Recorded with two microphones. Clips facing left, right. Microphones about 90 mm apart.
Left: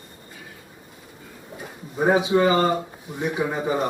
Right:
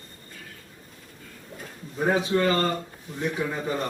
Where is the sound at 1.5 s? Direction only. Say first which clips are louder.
Left 4 dB; 20° left (ahead or behind).